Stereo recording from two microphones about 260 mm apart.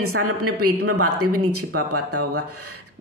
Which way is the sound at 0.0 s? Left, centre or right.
Right.